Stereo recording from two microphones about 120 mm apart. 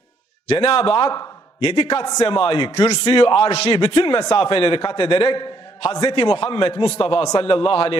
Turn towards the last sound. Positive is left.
turn(degrees=45)  # may be behind; listen again after turning